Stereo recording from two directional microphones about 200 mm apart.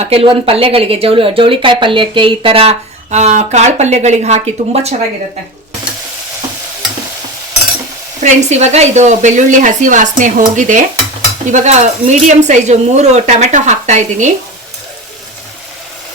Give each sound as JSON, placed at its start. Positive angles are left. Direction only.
{"t": 0.0, "sound": "speech", "side_deg": -30}
{"t": 8.2, "sound": "speech", "side_deg": -35}